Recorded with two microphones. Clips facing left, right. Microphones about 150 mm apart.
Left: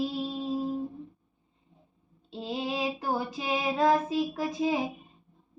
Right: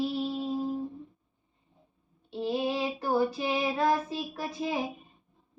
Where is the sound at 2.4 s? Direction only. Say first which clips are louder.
Right 2 dB; 20° left (ahead or behind).